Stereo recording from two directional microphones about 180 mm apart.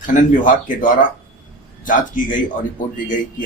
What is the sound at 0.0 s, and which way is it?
Speech, 45° left (ahead or behind).